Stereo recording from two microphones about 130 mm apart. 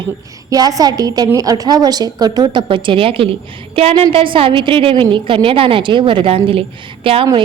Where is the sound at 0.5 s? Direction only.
30° right (ahead or behind).